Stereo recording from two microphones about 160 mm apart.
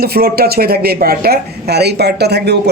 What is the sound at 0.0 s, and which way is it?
Speech, 75° right (ahead or behind).